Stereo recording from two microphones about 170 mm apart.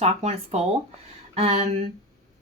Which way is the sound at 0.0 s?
40° right (ahead or behind).